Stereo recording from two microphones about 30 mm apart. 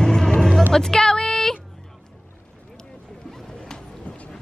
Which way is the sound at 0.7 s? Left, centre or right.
Centre.